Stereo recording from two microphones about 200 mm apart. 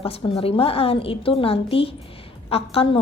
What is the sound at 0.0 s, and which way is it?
A woman's voice, 30° left (ahead or behind).